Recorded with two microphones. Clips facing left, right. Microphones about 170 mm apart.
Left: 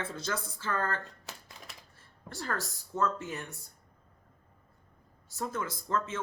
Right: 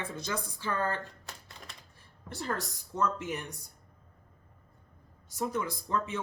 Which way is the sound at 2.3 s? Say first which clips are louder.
Right 1 dB; 20° right (ahead or behind).